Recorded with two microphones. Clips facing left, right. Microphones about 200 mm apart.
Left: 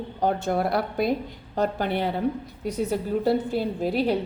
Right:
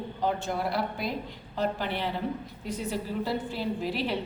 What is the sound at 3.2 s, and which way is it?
Speech, 55° left (ahead or behind).